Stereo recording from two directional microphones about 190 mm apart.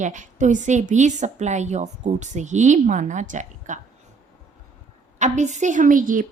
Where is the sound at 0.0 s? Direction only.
40° right (ahead or behind).